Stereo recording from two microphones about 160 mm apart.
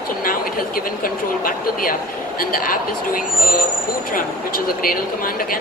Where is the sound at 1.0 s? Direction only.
60° left (ahead or behind).